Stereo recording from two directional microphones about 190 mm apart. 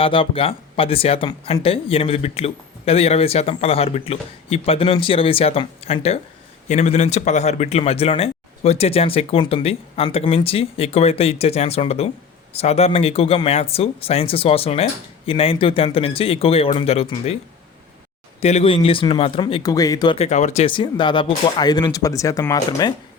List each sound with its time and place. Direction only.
0.0 s speech: 30° left (ahead or behind)
18.3 s speech: 30° left (ahead or behind)
20.1 s speech: 35° left (ahead or behind); by 22.9 s 20° left (ahead or behind)